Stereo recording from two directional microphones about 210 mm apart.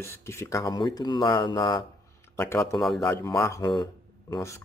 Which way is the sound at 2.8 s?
Centre (ahead or behind).